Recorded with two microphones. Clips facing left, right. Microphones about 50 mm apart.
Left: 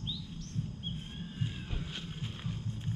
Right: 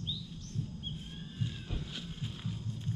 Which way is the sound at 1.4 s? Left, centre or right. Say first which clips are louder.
Even; left.